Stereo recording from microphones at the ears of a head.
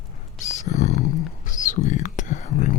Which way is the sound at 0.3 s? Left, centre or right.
Left.